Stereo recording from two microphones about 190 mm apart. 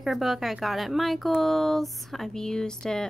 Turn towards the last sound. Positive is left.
turn(degrees=5)  # may be behind; listen again after turning